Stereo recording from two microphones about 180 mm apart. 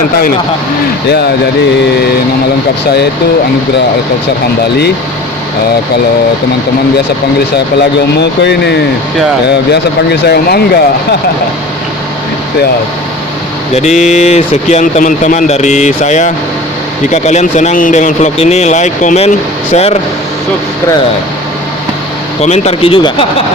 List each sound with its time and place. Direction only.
7.8 s speech: 70° left (ahead or behind)
13.7 s speech: 40° left (ahead or behind)
22.4 s speech: 35° left (ahead or behind)